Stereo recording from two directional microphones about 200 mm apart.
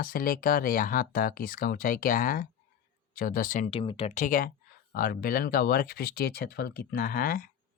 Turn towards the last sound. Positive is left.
turn(degrees=45)  # may be behind; listen again after turning